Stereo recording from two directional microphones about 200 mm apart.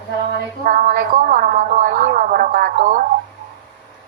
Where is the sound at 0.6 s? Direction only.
45° right (ahead or behind).